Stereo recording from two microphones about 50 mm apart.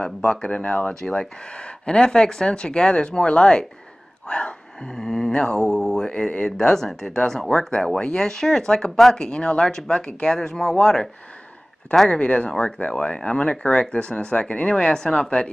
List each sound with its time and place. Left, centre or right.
0.0 s speech: left
1.0 s speech: centre
6.6 s speech: centre
9.2 s speech: centre
12.1 s speech: left